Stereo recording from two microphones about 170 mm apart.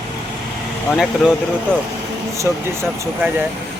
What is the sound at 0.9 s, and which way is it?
Speech, centre (ahead or behind).